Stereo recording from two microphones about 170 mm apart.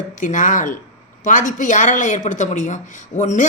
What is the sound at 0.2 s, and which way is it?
A man's voice, 50° left (ahead or behind).